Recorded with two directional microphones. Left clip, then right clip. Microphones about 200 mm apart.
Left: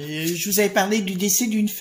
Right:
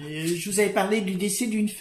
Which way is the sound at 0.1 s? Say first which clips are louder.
Left 3 dB; 45° left (ahead or behind).